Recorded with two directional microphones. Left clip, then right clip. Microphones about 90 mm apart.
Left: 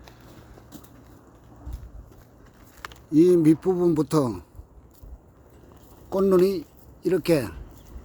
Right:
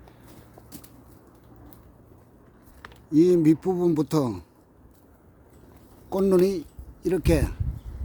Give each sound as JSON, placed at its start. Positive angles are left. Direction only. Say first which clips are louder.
{"t": 3.1, "sound": "speech", "louder": "left 1 dB", "side_deg": -20}
{"t": 6.1, "sound": "speech", "louder": "left 1 dB", "side_deg": -20}